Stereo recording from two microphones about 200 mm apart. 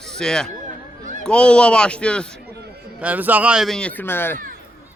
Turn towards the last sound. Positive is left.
turn(degrees=10)  # may be behind; listen again after turning